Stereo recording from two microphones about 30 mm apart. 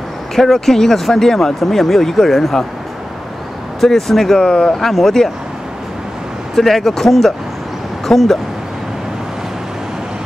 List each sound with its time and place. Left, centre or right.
0.4 s speech: centre
3.8 s speech: centre
4.5 s speech: left
4.7 s speech: centre
6.5 s speech: centre